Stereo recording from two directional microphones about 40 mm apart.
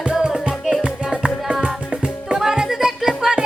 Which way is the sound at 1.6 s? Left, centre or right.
Right.